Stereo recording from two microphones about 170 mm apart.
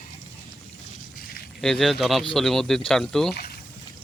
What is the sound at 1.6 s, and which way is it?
Speech, centre (ahead or behind).